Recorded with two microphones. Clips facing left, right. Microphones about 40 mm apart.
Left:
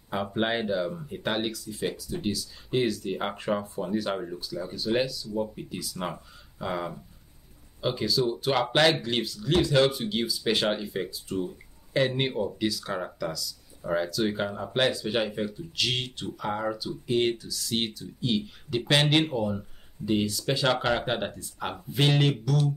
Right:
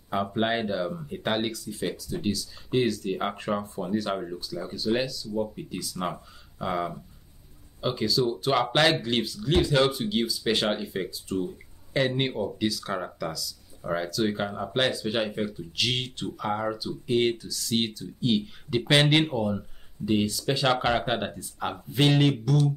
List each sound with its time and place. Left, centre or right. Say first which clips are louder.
0.1 s speech: right 1 dB; centre